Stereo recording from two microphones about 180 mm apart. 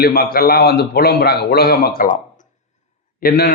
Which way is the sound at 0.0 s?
55° left (ahead or behind).